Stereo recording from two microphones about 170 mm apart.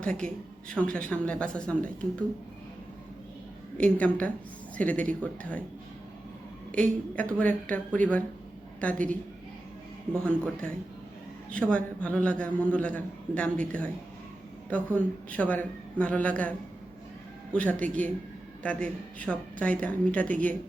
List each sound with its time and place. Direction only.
0.0 s a woman's voice: 5° left (ahead or behind)
3.8 s a man's voice: 5° left (ahead or behind)
6.7 s a man's voice: 5° left (ahead or behind)
10.2 s a man's voice: 5° left (ahead or behind)
19.2 s a man's voice: 5° left (ahead or behind)